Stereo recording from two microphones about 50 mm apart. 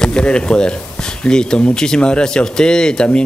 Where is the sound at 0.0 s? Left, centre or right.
Centre.